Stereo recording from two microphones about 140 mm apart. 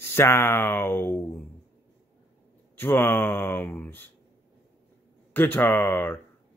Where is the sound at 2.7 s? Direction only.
15° left (ahead or behind).